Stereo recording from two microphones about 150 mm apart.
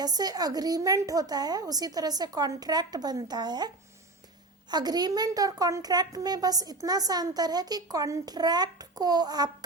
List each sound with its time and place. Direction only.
0.0 s a woman's voice: 25° right (ahead or behind)
4.7 s a woman's voice: 25° right (ahead or behind)